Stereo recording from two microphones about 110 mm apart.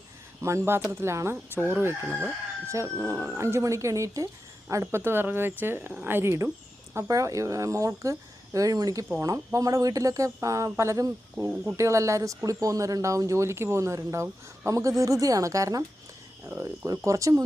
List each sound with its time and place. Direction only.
0.4 s speech: 25° right (ahead or behind)
11.3 s speech: 15° right (ahead or behind)
11.8 s speech: 25° right (ahead or behind)